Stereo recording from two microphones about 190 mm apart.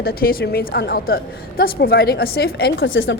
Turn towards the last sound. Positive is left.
turn(degrees=90)